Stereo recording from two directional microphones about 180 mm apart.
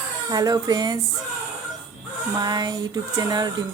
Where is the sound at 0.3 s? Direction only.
20° right (ahead or behind).